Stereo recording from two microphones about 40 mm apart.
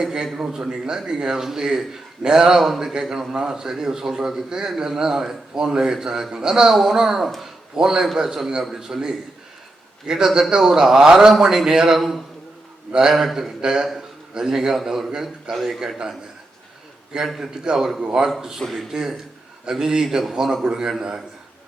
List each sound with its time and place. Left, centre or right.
0.3 s a man's voice: centre
7.4 s a sound: centre
8.2 s speech: centre
11.9 s a man's voice: centre
12.9 s a man's voice: centre
13.1 s a man's voice: centre
13.6 s a man's voice: centre
17.4 s speech: centre